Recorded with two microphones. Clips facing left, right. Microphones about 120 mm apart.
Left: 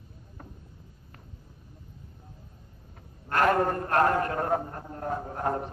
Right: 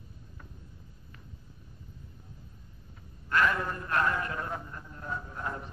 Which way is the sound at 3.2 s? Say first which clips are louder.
Left 5 dB; 50° left (ahead or behind).